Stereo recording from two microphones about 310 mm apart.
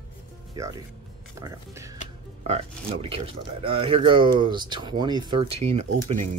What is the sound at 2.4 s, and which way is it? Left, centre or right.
Speech, centre.